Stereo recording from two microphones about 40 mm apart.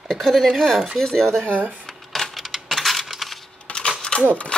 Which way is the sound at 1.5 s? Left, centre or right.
Right.